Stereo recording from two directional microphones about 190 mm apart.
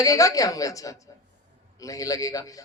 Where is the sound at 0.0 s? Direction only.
20° left (ahead or behind).